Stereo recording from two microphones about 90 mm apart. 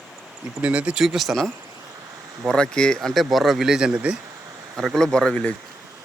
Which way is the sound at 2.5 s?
10° left (ahead or behind).